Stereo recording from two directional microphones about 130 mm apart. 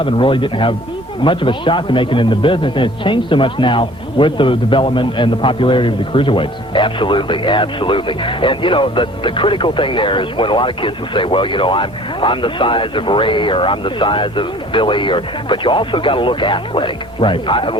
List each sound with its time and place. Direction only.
0.0 s a man's voice: 40° left (ahead or behind)